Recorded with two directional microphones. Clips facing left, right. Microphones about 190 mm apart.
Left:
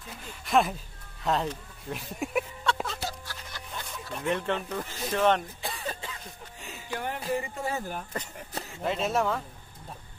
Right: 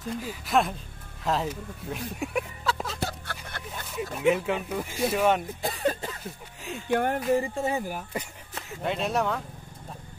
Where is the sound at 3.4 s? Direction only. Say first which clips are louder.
Left 1 dB; 60° right (ahead or behind).